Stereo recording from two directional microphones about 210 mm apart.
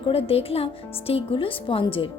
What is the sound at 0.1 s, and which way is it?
A woman's voice, 30° left (ahead or behind).